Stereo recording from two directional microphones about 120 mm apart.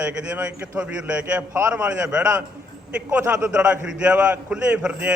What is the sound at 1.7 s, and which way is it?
Speech, 10° right (ahead or behind).